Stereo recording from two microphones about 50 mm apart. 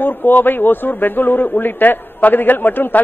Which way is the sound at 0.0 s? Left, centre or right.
Left.